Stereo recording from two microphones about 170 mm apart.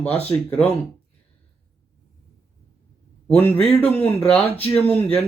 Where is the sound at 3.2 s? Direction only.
10° left (ahead or behind).